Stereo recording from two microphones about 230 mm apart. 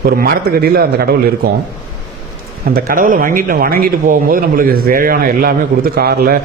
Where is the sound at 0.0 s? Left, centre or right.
Right.